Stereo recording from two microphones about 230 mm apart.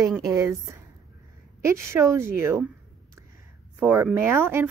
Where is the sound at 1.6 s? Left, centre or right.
Centre.